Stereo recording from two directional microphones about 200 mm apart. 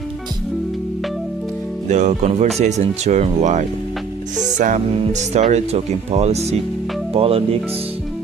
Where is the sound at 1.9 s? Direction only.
35° right (ahead or behind).